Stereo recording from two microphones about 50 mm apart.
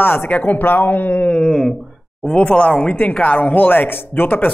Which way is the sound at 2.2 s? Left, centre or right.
Left.